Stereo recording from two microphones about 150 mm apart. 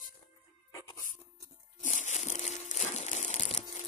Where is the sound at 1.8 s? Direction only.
55° left (ahead or behind).